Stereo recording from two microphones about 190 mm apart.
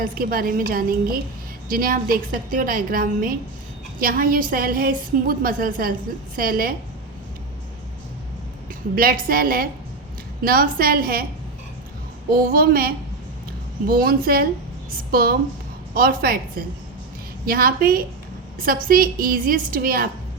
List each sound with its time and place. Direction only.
0.0 s a woman's voice: 50° right (ahead or behind)
9.0 s a woman's voice: 50° right (ahead or behind)
12.3 s a woman's voice: 50° right (ahead or behind)